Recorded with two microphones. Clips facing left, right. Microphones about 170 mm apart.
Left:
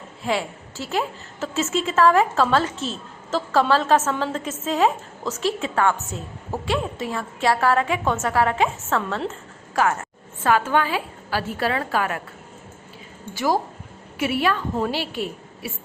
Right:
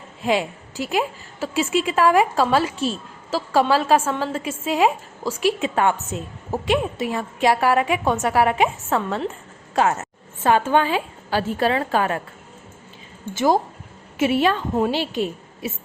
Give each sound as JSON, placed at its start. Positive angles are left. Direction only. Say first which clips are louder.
{"t": 0.2, "sound": "a woman's voice", "louder": "right 3 dB", "side_deg": -15}
{"t": 13.3, "sound": "a woman's voice", "louder": "right 3 dB", "side_deg": -20}